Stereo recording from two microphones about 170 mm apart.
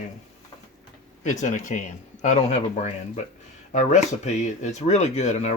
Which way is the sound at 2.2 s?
40° left (ahead or behind).